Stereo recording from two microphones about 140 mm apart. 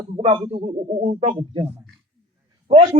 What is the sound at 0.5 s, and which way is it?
Speech, 55° right (ahead or behind).